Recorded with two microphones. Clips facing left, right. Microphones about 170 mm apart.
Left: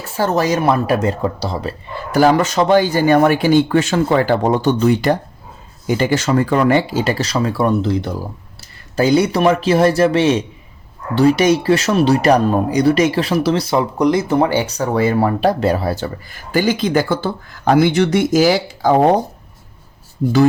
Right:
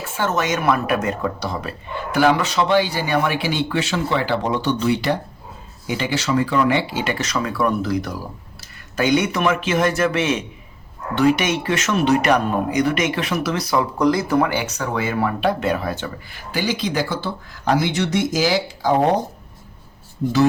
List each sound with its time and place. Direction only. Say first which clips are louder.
0.0 s speech: left 5 dB; 35° left (ahead or behind)
2.1 s speech: left 4 dB; 40° left (ahead or behind)